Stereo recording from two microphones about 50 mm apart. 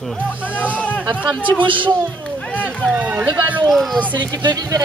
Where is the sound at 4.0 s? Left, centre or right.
Right.